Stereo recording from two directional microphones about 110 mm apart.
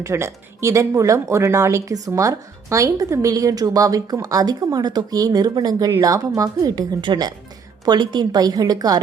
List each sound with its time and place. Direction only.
0.0 s speech: 25° right (ahead or behind)